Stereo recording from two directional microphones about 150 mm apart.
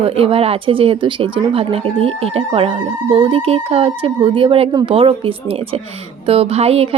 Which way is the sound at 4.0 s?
30° right (ahead or behind).